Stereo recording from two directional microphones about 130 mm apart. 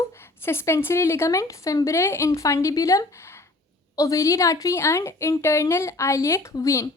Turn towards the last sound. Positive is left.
turn(degrees=25)  # may be behind; listen again after turning